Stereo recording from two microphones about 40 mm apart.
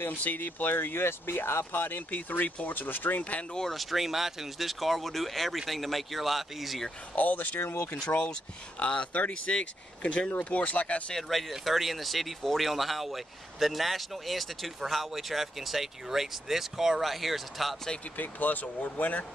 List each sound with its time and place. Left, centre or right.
0.1 s speech: left
3.7 s speech: centre
7.2 s speech: left
7.6 s speech: left
8.1 s speech: left
10.3 s speech: left
11.1 s speech: centre
18.1 s speech: left